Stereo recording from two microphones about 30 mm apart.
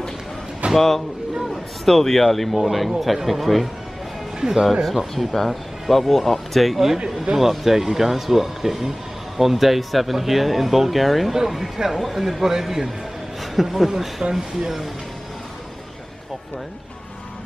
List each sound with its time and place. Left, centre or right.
0.7 s speech: centre
4.4 s speech: right
4.8 s speech: centre